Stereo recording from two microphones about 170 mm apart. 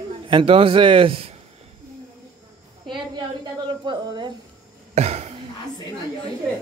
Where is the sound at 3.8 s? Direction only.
25° right (ahead or behind).